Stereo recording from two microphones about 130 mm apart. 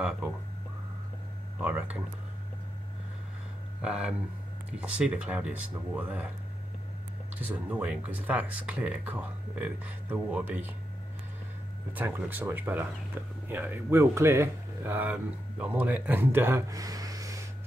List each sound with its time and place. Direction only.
1.6 s speech: 10° right (ahead or behind)
3.8 s speech: 5° right (ahead or behind)
7.3 s speech: 10° right (ahead or behind)
11.9 s speech: 15° right (ahead or behind)